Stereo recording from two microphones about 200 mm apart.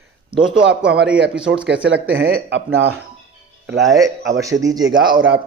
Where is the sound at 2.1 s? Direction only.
90° right.